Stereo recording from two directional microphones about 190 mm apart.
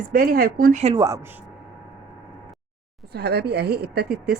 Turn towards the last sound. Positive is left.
turn(degrees=-55)  # may be behind; listen again after turning